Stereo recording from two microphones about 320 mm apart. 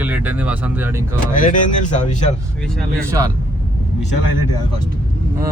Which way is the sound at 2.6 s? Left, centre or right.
Centre.